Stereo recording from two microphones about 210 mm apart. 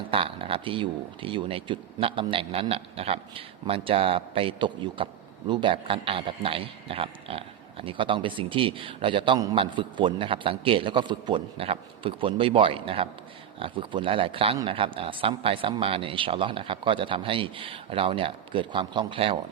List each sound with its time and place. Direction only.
0.1 s a man's voice: 25° right (ahead or behind)